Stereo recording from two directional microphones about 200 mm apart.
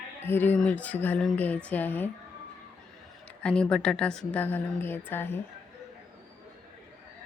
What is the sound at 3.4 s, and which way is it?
A woman's voice, 5° left (ahead or behind).